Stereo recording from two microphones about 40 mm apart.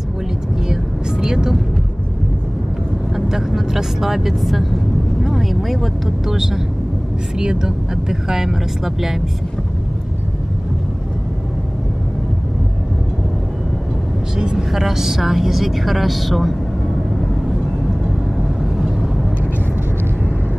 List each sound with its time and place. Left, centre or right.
0.7 s vehicle: centre
3.1 s speech: centre
14.3 s vehicle: centre
14.7 s a woman's voice: centre
18.4 s vehicle: centre